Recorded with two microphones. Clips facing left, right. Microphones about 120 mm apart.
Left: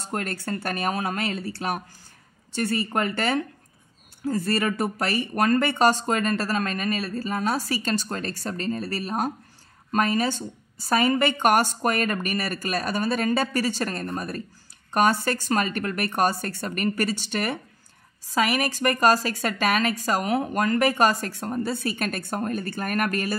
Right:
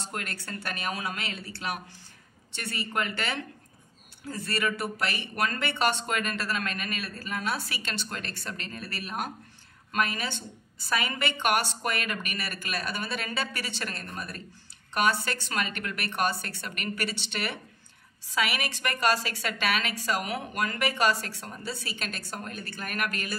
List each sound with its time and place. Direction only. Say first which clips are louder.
0.1 s a woman's voice: left 11 dB; 40° left (ahead or behind)